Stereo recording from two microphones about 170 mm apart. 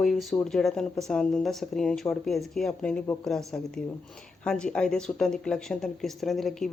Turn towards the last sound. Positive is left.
turn(degrees=0)  # may be behind; listen again after turning